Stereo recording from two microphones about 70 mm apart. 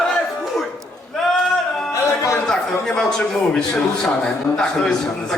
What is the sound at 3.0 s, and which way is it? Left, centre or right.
A man's voice, centre.